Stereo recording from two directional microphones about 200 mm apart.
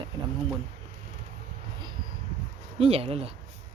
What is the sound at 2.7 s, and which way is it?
Speech, 30° right (ahead or behind).